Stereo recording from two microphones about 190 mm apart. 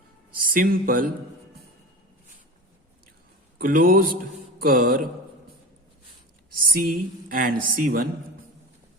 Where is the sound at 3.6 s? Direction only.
50° right (ahead or behind).